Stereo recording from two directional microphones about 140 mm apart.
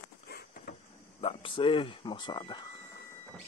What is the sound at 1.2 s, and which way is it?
Speech, 40° left (ahead or behind).